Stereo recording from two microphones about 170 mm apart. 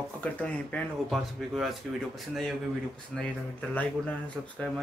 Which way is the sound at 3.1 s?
5° left (ahead or behind).